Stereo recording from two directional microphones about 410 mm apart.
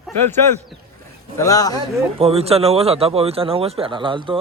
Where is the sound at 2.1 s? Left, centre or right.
Centre.